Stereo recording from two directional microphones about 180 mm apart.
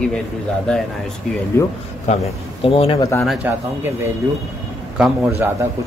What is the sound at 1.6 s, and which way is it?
Speech, 15° left (ahead or behind).